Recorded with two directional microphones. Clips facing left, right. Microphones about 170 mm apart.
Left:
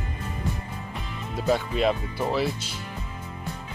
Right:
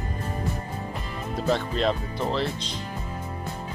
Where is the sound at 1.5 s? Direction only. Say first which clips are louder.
Left 1 dB; 5° left (ahead or behind).